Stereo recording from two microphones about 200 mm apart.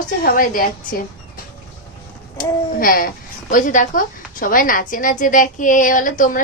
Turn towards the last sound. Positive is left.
turn(degrees=40)  # may be behind; listen again after turning